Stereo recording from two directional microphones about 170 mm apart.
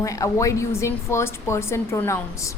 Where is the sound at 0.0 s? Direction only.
20° left (ahead or behind).